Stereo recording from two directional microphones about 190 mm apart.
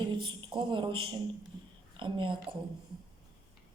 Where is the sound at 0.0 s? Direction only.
25° right (ahead or behind).